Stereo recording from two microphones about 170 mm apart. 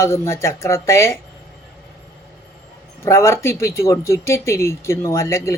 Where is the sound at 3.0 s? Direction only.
15° left (ahead or behind).